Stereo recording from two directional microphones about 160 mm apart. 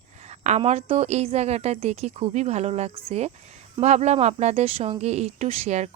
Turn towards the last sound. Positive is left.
turn(degrees=-45)  # may be behind; listen again after turning